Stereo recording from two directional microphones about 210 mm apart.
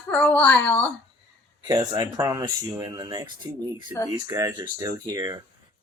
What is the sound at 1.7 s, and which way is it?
Speech, 20° right (ahead or behind).